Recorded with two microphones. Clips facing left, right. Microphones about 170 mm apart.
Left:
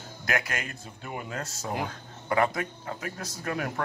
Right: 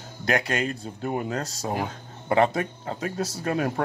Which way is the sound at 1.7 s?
25° right (ahead or behind).